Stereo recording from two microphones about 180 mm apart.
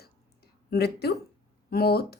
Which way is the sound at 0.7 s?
65° left (ahead or behind).